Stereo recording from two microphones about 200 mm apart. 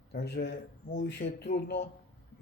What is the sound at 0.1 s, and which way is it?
Speech, 50° left (ahead or behind).